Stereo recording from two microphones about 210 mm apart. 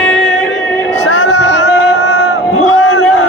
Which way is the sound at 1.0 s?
60° left (ahead or behind).